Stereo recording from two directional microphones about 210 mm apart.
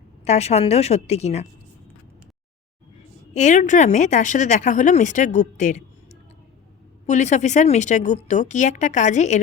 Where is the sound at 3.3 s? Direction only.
35° left (ahead or behind).